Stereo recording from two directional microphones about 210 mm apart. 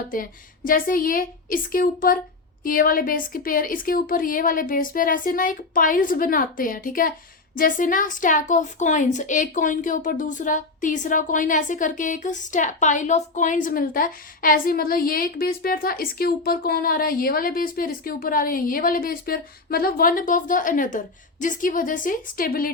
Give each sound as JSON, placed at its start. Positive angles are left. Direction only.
{"t": 0.1, "sound": "a woman's voice", "side_deg": 40}